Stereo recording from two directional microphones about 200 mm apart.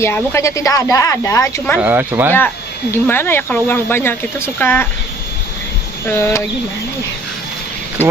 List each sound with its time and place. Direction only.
0.0 s speech: 15° left (ahead or behind)
1.8 s speech: 10° right (ahead or behind)
2.9 s speech: 10° left (ahead or behind)
6.1 s speech: 10° left (ahead or behind)